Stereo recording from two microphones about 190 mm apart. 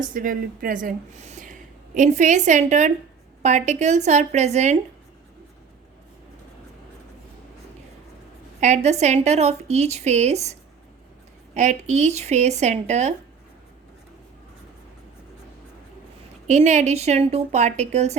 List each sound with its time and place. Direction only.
0.0 s speech: 45° right (ahead or behind)
8.6 s speech: 35° right (ahead or behind)
16.5 s speech: 40° right (ahead or behind)